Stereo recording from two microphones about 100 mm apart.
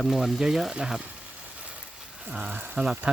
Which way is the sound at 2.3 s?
10° right (ahead or behind).